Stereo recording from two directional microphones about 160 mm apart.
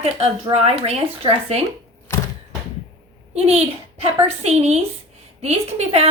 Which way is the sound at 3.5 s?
40° right (ahead or behind).